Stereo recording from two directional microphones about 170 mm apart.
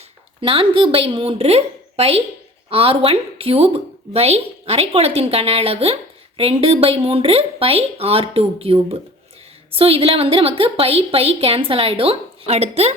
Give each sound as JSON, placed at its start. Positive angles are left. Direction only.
{"t": 0.4, "sound": "a woman's voice", "side_deg": -30}